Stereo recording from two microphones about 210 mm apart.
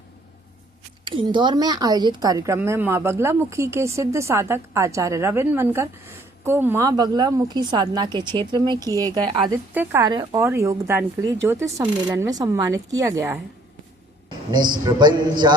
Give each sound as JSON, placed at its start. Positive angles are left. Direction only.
{"t": 1.0, "sound": "a woman's voice", "side_deg": -25}